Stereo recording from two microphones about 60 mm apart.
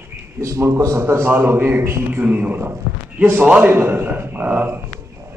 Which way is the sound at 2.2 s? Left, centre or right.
Right.